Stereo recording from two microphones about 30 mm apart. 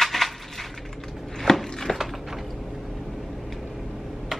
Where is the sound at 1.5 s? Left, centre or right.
Centre.